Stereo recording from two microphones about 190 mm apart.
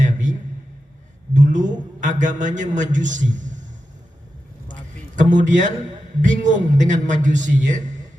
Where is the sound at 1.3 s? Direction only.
40° right (ahead or behind).